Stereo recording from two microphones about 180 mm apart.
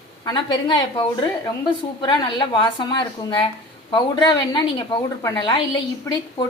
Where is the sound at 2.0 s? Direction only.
25° left (ahead or behind).